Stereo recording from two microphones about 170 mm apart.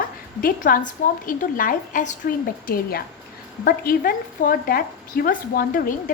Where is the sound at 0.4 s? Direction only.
55° left (ahead or behind).